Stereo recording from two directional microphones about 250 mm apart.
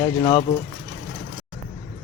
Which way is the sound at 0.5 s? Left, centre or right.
Centre.